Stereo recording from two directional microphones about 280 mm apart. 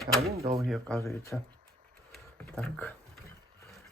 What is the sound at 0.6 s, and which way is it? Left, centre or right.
Speech, centre.